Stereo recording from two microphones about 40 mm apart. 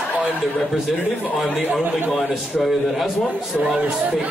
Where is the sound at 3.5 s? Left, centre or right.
Centre.